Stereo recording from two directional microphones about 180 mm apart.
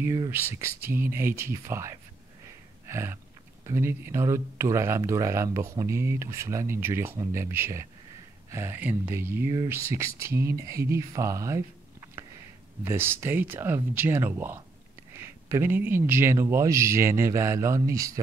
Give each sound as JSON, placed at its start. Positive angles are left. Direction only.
{"t": 0.0, "sound": "speech", "side_deg": -15}
{"t": 2.9, "sound": "a sound", "side_deg": -15}
{"t": 3.6, "sound": "speech", "side_deg": -15}
{"t": 12.8, "sound": "speech", "side_deg": -10}